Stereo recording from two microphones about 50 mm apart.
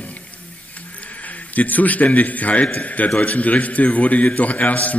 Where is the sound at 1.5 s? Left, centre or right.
Left.